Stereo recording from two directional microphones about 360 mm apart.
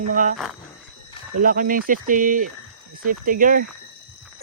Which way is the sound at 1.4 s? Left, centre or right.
Right.